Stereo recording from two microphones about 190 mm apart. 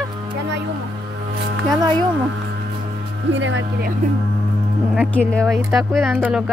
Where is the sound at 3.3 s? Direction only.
80° right.